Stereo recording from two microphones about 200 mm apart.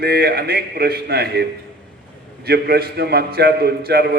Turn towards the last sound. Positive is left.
turn(degrees=-50)  # may be behind; listen again after turning